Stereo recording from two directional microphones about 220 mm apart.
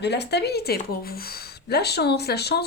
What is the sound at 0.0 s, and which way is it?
Speech, 50° left (ahead or behind).